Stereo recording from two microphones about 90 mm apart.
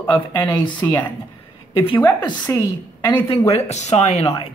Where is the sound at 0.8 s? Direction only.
35° left (ahead or behind).